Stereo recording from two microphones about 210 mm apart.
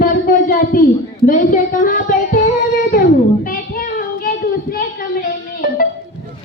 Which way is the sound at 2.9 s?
40° left (ahead or behind).